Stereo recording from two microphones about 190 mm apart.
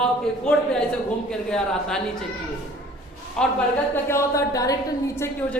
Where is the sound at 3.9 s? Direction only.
15° left (ahead or behind).